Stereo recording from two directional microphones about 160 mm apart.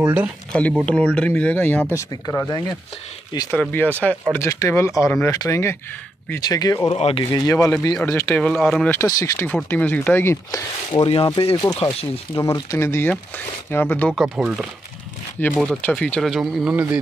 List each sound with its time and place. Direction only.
0.0 s speech: 10° right (ahead or behind)
0.5 s speech: 10° left (ahead or behind)
6.9 s speech: 40° left (ahead or behind)
7.2 s speech: 20° left (ahead or behind)
8.4 s speech: 5° left (ahead or behind)
8.8 s speech: 15° left (ahead or behind)
14.1 s speech: centre (ahead or behind)